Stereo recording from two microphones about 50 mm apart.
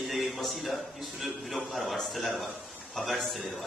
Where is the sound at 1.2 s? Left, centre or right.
Centre.